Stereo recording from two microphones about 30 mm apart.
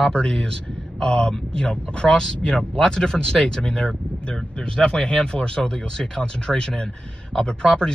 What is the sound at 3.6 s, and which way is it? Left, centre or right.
Speech, left.